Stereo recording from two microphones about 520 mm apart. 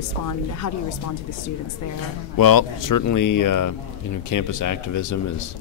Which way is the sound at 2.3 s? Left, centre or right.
Left.